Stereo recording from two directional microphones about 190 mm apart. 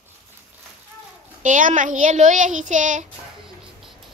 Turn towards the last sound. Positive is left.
turn(degrees=-40)  # may be behind; listen again after turning